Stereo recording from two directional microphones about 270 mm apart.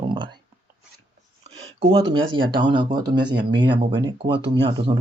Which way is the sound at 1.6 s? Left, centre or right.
Right.